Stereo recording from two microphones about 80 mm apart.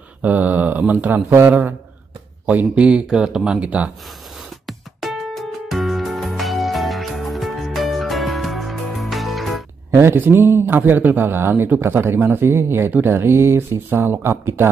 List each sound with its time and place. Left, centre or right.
0.2 s a man's voice: centre
2.4 s speech: centre
4.6 s music: centre
9.8 s a man's voice: right